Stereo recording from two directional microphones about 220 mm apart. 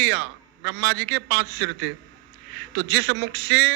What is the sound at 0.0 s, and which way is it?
A man's voice, 55° right (ahead or behind).